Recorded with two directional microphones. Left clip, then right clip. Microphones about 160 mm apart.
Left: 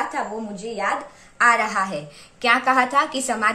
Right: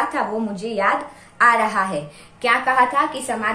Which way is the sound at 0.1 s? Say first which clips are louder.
Right 4 dB; 10° left (ahead or behind).